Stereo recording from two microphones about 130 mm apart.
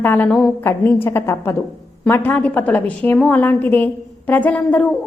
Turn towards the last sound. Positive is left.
turn(degrees=10)  # may be behind; listen again after turning